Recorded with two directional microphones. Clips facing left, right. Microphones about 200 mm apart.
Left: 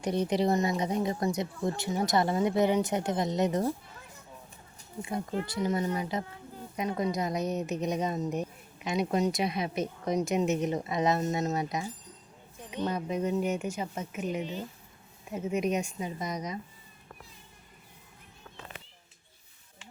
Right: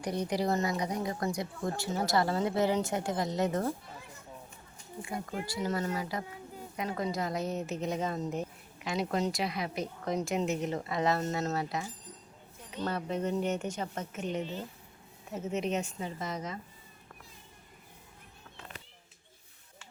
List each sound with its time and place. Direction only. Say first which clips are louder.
0.0 s speech: left 4 dB; 20° left (ahead or behind)
5.0 s a woman's voice: left 4 dB; 20° left (ahead or behind)